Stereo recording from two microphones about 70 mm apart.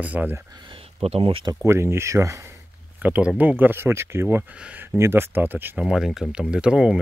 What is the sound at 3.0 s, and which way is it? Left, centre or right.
Speech, right.